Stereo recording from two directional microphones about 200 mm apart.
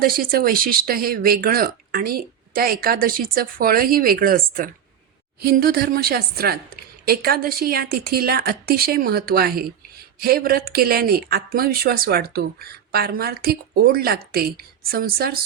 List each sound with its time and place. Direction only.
0.0 s speech: 45° right (ahead or behind)